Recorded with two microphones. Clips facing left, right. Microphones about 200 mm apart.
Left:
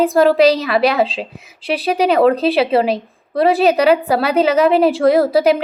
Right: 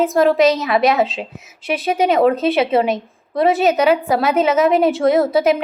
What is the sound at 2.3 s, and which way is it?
Speech, 35° left (ahead or behind).